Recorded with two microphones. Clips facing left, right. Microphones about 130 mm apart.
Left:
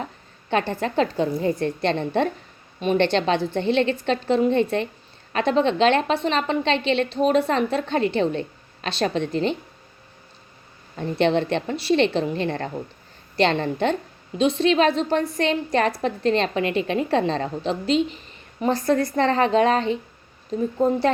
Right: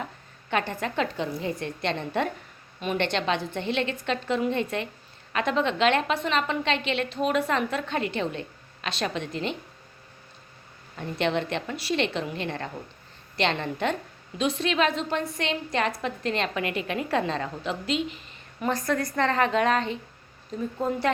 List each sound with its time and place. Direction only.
0.5 s a woman's voice: 30° left (ahead or behind)
10.9 s a woman's voice: 30° left (ahead or behind)